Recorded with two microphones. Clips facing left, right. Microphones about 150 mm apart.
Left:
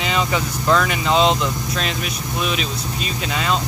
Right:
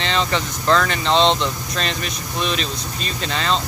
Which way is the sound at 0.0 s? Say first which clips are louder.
Even; 5° left (ahead or behind).